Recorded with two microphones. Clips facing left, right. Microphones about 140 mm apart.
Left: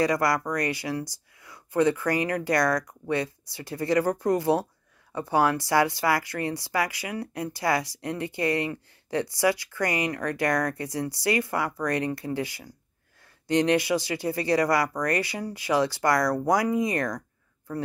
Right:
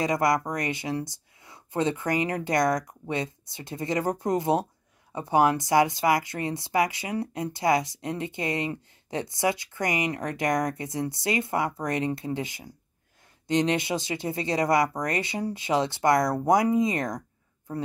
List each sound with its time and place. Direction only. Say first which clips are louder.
0.0 s speech: even; 20° right (ahead or behind)